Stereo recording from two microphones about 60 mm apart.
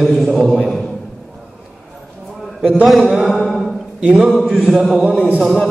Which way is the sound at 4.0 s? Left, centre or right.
Centre.